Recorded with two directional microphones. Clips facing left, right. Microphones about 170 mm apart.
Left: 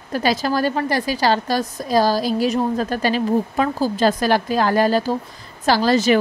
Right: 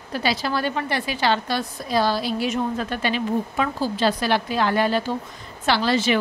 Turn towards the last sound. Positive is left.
turn(degrees=40)  # may be behind; listen again after turning